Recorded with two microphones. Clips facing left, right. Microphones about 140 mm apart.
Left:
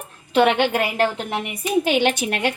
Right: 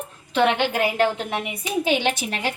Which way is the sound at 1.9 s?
55° left (ahead or behind).